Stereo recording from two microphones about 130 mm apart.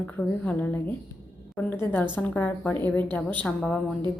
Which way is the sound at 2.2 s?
10° left (ahead or behind).